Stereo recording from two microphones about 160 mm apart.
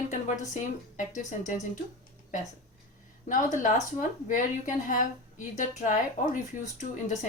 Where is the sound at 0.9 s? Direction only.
50° left (ahead or behind).